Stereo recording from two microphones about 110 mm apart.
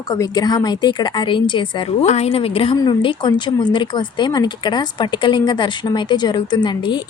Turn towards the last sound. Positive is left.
turn(degrees=45)  # may be behind; listen again after turning